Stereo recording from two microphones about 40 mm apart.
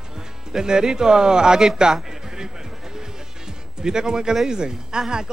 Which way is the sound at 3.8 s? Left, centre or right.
Centre.